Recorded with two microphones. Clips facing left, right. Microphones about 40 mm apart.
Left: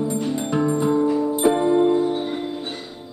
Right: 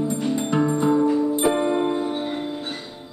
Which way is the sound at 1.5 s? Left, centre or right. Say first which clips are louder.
Left 8 dB; right.